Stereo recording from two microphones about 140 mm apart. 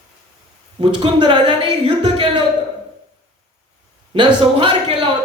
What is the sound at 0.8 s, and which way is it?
Speech, 35° right (ahead or behind).